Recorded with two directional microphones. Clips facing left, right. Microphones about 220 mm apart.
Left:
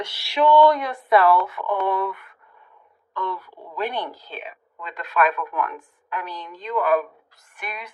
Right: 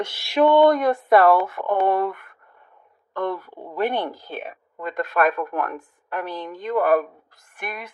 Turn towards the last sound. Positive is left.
turn(degrees=-50)  # may be behind; listen again after turning